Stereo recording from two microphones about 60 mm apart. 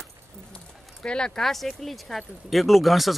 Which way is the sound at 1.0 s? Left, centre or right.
Centre.